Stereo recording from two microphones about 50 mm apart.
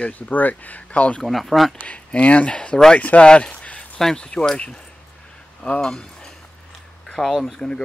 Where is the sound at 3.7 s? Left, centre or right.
Left.